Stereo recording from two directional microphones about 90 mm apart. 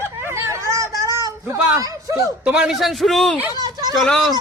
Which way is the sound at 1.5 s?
40° right (ahead or behind).